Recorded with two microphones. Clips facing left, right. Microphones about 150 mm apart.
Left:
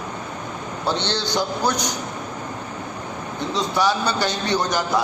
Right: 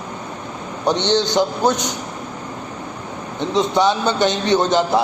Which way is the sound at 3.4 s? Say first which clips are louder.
Right 5 dB; 20° right (ahead or behind).